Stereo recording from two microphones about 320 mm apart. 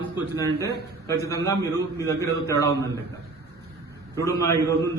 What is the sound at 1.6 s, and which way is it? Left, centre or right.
A man's voice, centre.